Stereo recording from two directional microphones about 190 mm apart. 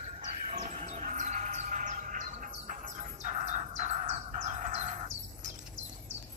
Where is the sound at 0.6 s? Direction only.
35° right (ahead or behind).